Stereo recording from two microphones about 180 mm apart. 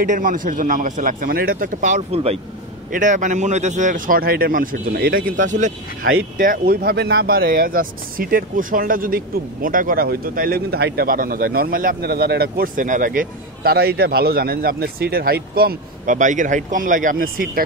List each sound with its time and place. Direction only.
0.0 s speech: 50° right (ahead or behind)